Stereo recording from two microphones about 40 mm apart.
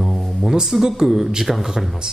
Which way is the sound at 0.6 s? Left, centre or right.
Centre.